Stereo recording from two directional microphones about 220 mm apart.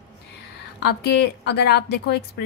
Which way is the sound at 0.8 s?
50° left (ahead or behind).